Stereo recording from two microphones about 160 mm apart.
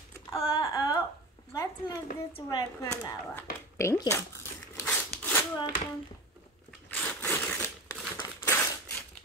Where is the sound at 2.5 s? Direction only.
20° left (ahead or behind).